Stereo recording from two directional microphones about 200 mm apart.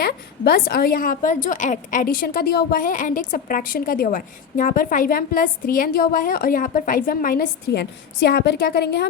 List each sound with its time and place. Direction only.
0.0 s a woman's voice: 50° left (ahead or behind)